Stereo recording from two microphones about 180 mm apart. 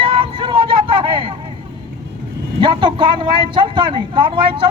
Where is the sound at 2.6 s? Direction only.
25° right (ahead or behind).